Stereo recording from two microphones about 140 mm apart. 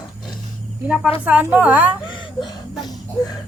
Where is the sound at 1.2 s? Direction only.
10° right (ahead or behind).